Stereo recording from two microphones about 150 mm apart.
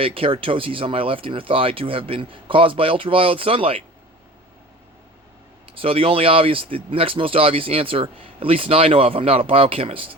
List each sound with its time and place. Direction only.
0.0 s speech: 35° right (ahead or behind)
5.8 s speech: 40° right (ahead or behind)